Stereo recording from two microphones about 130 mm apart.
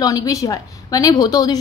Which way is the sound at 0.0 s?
25° left (ahead or behind).